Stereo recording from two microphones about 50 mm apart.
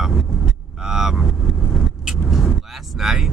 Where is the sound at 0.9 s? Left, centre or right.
Centre.